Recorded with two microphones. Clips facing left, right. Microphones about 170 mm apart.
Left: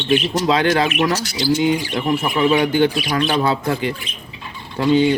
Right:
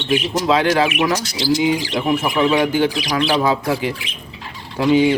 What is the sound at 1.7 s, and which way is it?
Speech, 90° right.